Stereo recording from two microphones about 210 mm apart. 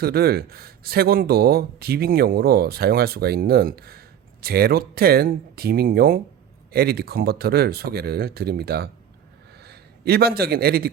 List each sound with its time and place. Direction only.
0.0 s a man's voice: 45° right (ahead or behind)